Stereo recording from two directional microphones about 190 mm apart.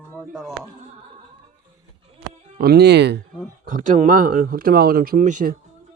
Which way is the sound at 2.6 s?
55° right (ahead or behind).